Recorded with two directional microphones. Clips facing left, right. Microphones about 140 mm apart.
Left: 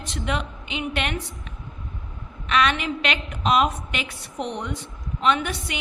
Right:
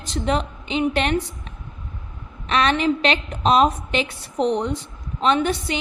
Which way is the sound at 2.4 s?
35° right (ahead or behind).